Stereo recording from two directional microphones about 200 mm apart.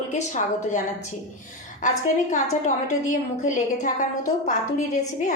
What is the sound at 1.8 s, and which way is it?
A woman's voice, 40° left (ahead or behind).